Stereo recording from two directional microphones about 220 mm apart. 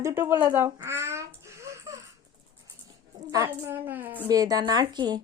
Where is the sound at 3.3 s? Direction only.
10° right (ahead or behind).